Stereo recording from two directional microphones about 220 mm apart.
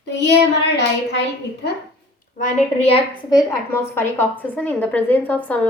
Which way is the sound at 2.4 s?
25° left (ahead or behind).